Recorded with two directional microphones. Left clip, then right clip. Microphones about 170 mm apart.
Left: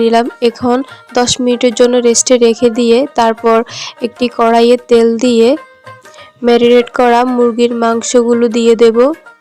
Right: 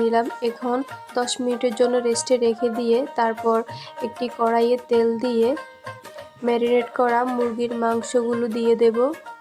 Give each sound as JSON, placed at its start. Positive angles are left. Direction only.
{"t": 0.0, "sound": "speech", "side_deg": 50}